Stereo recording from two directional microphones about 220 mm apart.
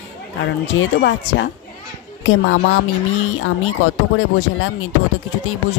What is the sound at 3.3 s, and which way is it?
Speech, 65° left (ahead or behind).